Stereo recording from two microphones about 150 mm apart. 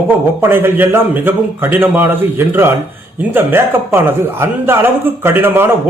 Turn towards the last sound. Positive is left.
turn(degrees=-15)  # may be behind; listen again after turning